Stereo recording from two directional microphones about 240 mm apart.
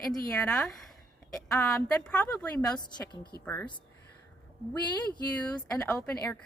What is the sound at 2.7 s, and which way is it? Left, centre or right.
A woman's voice, centre.